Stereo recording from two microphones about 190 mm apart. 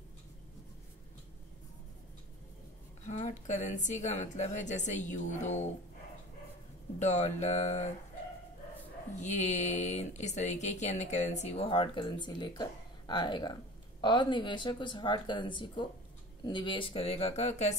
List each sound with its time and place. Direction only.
3.1 s speech: 40° left (ahead or behind)
7.0 s speech: 40° left (ahead or behind)
9.2 s speech: 40° left (ahead or behind)